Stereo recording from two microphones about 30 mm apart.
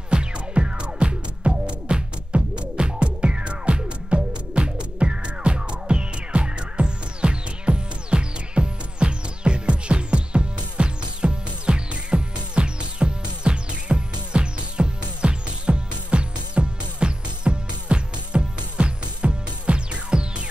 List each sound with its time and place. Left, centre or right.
0.1 s music: right